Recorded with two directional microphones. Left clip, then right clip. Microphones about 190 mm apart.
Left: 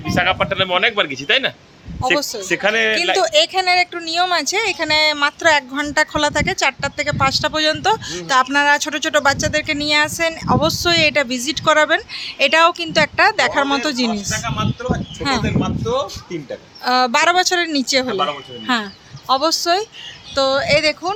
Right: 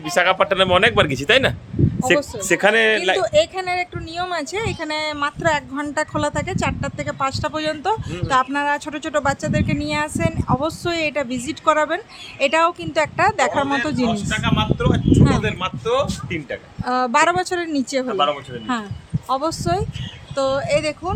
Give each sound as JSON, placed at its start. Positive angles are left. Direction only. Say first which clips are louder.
{"t": 0.0, "sound": "a man's voice", "louder": "right 1 dB", "side_deg": -75}
{"t": 2.5, "sound": "a man's voice", "louder": "right 1 dB", "side_deg": -55}
{"t": 3.2, "sound": "speech", "louder": "left 3 dB", "side_deg": 0}
{"t": 14.3, "sound": "speech", "louder": "right 1 dB", "side_deg": -25}
{"t": 15.2, "sound": "speech", "louder": "even", "side_deg": 5}
{"t": 15.6, "sound": "speech", "louder": "right 1 dB", "side_deg": -30}
{"t": 16.8, "sound": "speech", "louder": "left 2 dB", "side_deg": -5}